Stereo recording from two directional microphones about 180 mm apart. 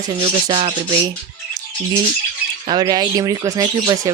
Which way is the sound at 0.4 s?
25° right (ahead or behind).